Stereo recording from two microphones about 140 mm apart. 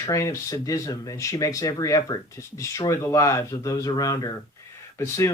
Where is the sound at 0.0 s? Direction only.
20° left (ahead or behind).